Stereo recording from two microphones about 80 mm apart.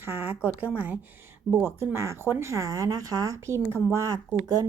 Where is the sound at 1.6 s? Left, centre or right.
Right.